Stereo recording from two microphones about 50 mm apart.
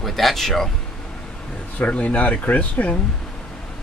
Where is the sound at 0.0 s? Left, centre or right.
Centre.